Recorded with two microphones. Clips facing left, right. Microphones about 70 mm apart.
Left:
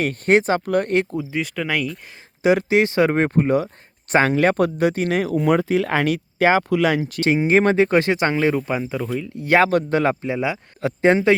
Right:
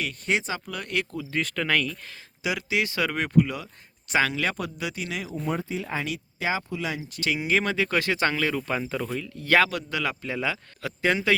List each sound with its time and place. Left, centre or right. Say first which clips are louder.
0.0 s speech: left 10 dB; left
1.3 s speech: left 2 dB; centre
2.4 s speech: left 11 dB; left
5.3 s speech: left 11 dB; left
6.1 s speech: left 11 dB; left
7.2 s speech: left 8 dB; left; by 9.2 s centre
9.4 s speech: left 5 dB; left
9.6 s speech: left 11 dB; left
10.2 s speech: left 6 dB; centre
10.8 s speech: left 10 dB; left